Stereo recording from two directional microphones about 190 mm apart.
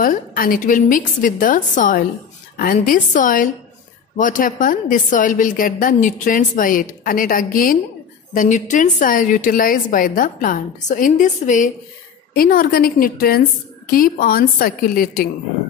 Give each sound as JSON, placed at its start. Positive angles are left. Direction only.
{"t": 0.0, "sound": "a woman's voice", "side_deg": 50}